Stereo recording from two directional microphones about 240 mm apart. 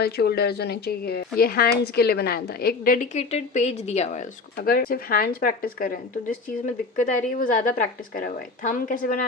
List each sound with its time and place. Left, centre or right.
0.0 s a woman's voice: left